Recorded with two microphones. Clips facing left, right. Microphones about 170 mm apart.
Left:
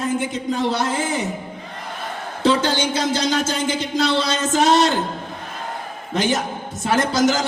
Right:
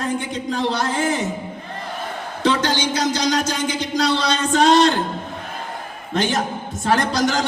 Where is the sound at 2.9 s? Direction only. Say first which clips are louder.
Even; 25° left (ahead or behind).